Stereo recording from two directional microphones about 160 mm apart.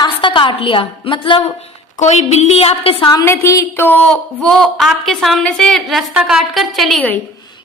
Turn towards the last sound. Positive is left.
turn(degrees=5)  # may be behind; listen again after turning